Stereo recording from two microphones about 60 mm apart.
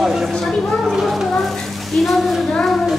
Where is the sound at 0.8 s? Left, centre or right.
Centre.